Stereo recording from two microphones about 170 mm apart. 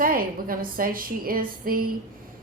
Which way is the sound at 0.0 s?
55° right (ahead or behind).